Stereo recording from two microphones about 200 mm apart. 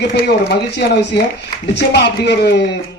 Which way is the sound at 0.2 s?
55° left (ahead or behind).